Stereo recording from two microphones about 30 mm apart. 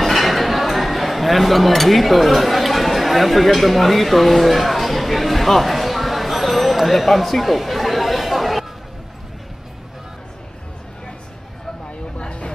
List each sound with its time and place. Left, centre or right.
0.0 s chink: centre
12.2 s vehicle: left